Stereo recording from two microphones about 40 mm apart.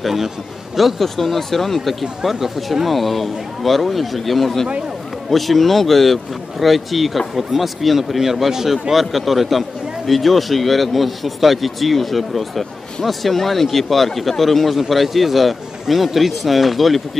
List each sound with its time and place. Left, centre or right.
0.0 s a man's voice: centre